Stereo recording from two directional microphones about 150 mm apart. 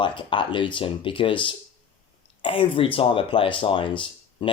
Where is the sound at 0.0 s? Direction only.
35° left (ahead or behind).